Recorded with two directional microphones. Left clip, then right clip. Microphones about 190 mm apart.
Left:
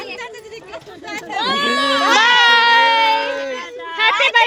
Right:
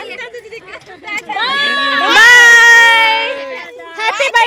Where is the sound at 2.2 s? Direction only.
Centre (ahead or behind).